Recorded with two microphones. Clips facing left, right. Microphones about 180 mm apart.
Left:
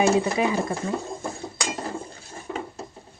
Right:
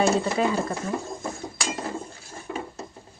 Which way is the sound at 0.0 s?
15° left (ahead or behind).